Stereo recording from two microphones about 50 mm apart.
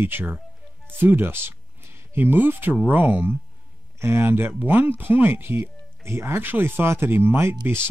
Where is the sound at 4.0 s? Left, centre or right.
Right.